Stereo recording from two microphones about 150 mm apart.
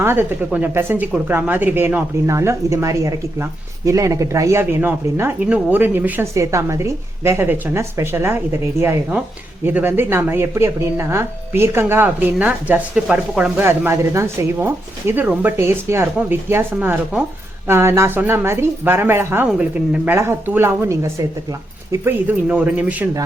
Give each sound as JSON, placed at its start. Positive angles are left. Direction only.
{"t": 0.0, "sound": "a woman's voice", "side_deg": -15}